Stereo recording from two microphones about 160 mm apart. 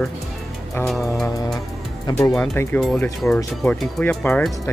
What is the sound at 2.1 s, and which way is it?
Speech, 15° left (ahead or behind).